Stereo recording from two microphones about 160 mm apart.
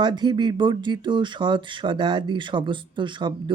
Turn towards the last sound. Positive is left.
turn(degrees=-30)  # may be behind; listen again after turning